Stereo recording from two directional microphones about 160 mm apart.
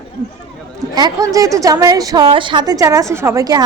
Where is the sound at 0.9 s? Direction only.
25° right (ahead or behind).